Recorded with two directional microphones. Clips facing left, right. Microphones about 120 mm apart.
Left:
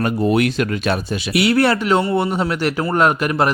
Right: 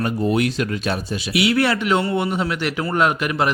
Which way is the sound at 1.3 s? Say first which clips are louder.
Left 3 dB; 45° left (ahead or behind).